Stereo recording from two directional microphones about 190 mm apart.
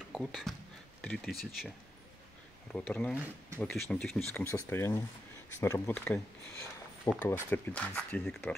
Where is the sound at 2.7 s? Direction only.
5° left (ahead or behind).